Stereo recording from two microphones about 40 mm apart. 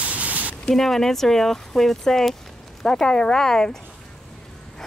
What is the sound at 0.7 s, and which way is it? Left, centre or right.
Speech, centre.